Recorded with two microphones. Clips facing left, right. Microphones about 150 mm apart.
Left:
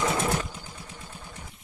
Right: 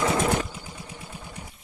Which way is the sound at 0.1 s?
25° right (ahead or behind).